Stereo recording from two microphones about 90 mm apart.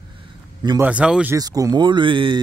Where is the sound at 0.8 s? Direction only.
15° right (ahead or behind).